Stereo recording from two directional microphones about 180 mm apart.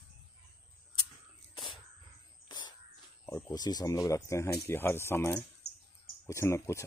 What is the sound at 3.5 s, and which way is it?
Speech, 20° left (ahead or behind).